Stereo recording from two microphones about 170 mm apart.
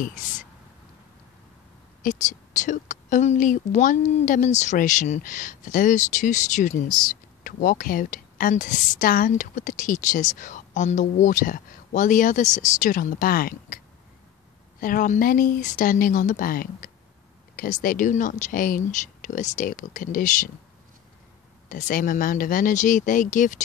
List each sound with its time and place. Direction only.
2.0 s a woman's voice: 45° left (ahead or behind)
14.8 s a woman's voice: 55° left (ahead or behind)
21.6 s a woman's voice: 50° left (ahead or behind)